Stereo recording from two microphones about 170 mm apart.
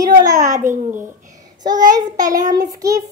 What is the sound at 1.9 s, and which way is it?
Child singing, 20° right (ahead or behind).